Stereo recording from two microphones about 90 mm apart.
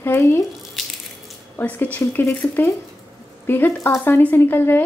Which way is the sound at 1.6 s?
20° left (ahead or behind).